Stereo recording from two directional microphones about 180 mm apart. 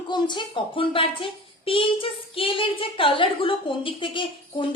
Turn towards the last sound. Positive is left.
turn(degrees=30)  # may be behind; listen again after turning